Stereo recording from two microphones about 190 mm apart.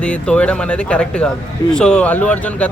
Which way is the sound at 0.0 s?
5° left (ahead or behind).